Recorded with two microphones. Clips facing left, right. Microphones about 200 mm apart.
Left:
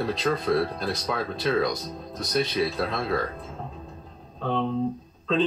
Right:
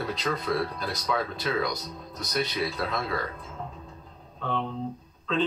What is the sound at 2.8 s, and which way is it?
Speech, 35° left (ahead or behind).